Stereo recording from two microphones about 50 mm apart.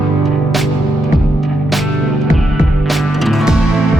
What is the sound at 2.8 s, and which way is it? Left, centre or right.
Music, centre.